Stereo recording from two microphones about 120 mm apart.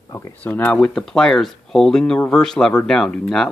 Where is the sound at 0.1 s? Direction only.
25° left (ahead or behind).